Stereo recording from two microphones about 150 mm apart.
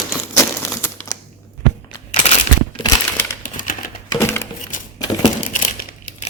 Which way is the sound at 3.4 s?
65° left (ahead or behind).